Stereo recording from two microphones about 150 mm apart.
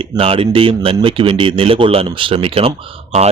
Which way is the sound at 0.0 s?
35° right (ahead or behind).